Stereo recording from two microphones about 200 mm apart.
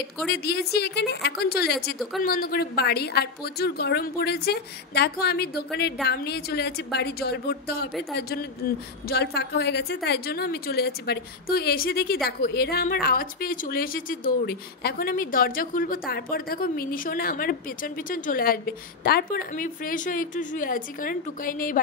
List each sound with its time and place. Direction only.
0.3 s a woman's voice: 55° left (ahead or behind)